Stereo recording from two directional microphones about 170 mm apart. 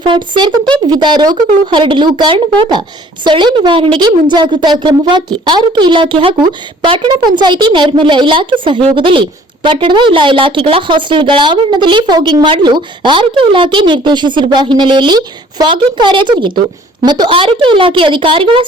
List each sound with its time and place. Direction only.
0.0 s a woman's voice: 25° right (ahead or behind)